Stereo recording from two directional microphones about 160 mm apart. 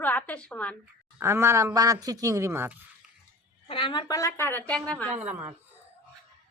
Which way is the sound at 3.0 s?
5° right (ahead or behind).